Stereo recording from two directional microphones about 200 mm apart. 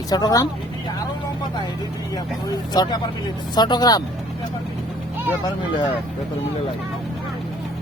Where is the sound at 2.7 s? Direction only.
20° left (ahead or behind).